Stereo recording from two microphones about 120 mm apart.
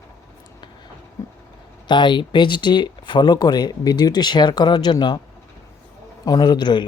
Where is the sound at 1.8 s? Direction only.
40° left (ahead or behind).